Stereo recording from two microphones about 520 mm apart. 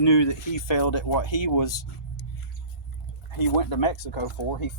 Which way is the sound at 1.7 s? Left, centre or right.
Left.